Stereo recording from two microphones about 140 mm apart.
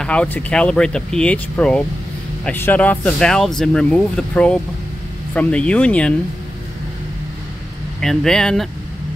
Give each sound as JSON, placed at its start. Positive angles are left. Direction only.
{"t": 0.0, "sound": "speech", "side_deg": 10}
{"t": 8.0, "sound": "speech", "side_deg": 5}